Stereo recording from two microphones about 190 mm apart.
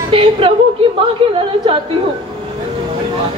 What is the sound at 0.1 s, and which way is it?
A man's voice, 30° right (ahead or behind).